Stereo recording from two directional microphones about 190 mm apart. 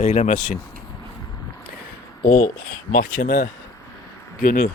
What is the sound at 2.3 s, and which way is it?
Speech, 50° left (ahead or behind).